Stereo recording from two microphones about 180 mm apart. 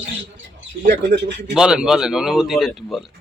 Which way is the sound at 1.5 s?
5° right (ahead or behind).